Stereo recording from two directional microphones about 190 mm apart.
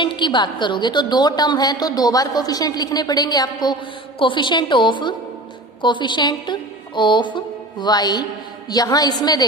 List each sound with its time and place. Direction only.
0.0 s a woman's voice: 25° left (ahead or behind)